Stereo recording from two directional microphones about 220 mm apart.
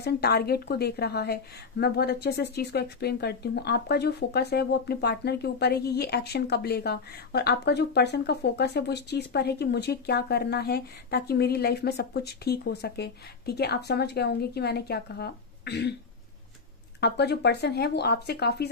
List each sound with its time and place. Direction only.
0.0 s a woman's voice: 45° left (ahead or behind)
17.0 s a woman's voice: 50° left (ahead or behind)